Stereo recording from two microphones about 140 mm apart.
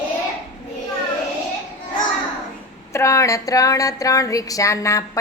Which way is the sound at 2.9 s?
20° left (ahead or behind).